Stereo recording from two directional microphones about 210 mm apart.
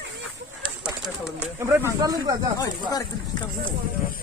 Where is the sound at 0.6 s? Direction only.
5° right (ahead or behind).